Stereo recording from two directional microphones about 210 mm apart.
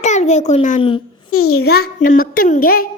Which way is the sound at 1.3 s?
90° left.